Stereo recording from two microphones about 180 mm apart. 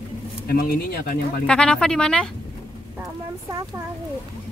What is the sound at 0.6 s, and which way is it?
Speech, 55° left (ahead or behind).